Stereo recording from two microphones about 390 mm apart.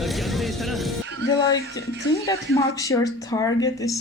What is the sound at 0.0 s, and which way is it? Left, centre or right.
Vehicle, centre.